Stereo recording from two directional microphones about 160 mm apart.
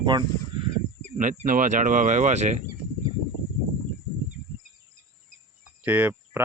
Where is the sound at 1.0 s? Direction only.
50° right (ahead or behind).